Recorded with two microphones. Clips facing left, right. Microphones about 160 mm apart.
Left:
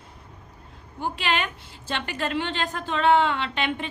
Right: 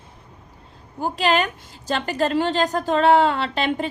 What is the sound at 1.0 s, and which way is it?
A woman's voice, 40° right (ahead or behind).